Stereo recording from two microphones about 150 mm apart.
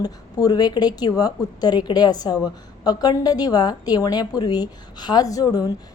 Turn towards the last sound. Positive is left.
turn(degrees=25)  # may be behind; listen again after turning